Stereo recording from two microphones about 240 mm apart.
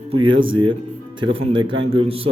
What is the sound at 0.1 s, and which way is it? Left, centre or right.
Speech, right.